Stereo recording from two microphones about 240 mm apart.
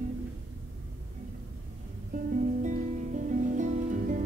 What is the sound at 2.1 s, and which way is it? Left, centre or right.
Music, right.